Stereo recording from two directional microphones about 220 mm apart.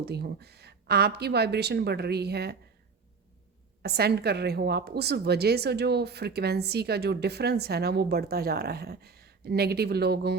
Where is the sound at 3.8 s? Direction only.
45° right (ahead or behind).